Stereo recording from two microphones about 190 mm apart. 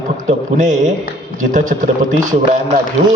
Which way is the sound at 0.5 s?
40° right (ahead or behind).